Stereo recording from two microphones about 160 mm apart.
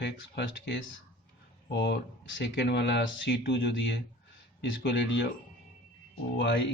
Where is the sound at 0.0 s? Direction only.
90° left.